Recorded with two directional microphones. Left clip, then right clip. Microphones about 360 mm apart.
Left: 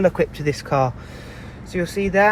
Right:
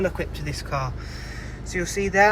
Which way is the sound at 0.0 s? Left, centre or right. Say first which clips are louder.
Left 8 dB; centre.